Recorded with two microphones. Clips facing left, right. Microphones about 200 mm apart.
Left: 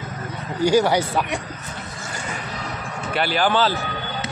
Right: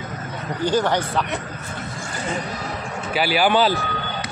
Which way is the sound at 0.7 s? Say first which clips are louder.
Left 3 dB; 10° left (ahead or behind).